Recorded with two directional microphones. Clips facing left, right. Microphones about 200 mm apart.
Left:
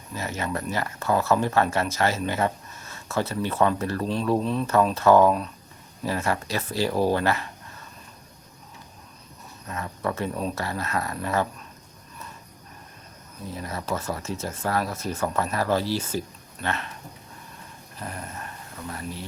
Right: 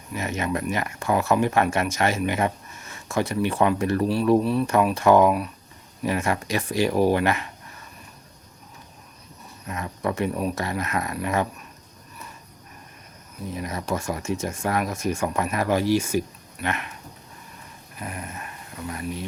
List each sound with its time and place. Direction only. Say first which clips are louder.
0.1 s speech: right 3 dB; 15° right (ahead or behind)
9.6 s speech: right 2 dB; 15° right (ahead or behind)
13.5 s speech: right 2 dB; 15° right (ahead or behind)
18.0 s speech: right 1 dB; 15° right (ahead or behind)